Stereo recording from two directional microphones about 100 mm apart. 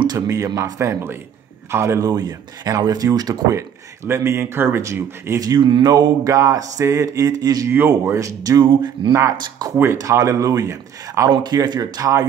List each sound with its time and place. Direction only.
0.0 s speech: 40° right (ahead or behind)
2.0 s mantra: 40° right (ahead or behind)
3.5 s speech: 30° right (ahead or behind)
5.6 s mantra: 50° right (ahead or behind); by 8.6 s 35° right (ahead or behind)
8.6 s speech: 55° right (ahead or behind)
9.4 s mantra: 40° right (ahead or behind)
9.8 s mantra: 30° right (ahead or behind)
11.2 s mantra: 45° right (ahead or behind)